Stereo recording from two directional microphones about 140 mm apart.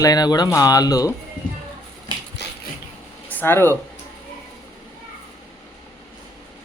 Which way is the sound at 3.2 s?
15° left (ahead or behind).